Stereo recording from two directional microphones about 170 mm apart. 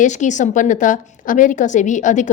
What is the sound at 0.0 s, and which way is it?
A woman's voice, 45° left (ahead or behind).